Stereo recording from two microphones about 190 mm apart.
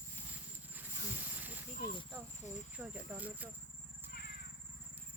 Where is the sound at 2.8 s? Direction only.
10° right (ahead or behind).